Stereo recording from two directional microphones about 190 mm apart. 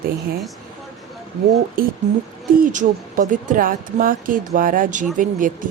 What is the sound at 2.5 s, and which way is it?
A woman's voice, 45° right (ahead or behind).